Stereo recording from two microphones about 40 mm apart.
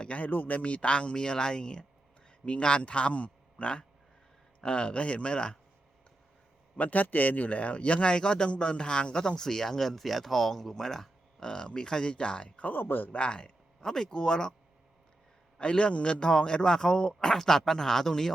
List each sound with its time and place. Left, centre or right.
0.2 s a man's voice: left
6.7 s a man's voice: left; by 11.4 s centre
11.4 s a man's voice: left
12.5 s speech: left
12.7 s speech: left
13.1 s a man's voice: left
13.8 s speech: centre
15.5 s a man's voice: left; by 18.3 s centre